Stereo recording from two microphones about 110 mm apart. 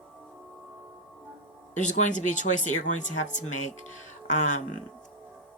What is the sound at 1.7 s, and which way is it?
Speech, 90° left.